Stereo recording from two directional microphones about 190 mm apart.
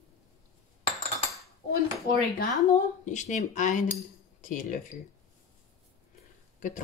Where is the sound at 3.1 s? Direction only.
40° left (ahead or behind).